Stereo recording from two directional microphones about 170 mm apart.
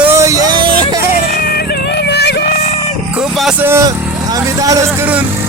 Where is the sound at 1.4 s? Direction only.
65° left (ahead or behind).